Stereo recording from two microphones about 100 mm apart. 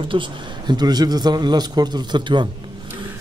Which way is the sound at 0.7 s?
45° right (ahead or behind).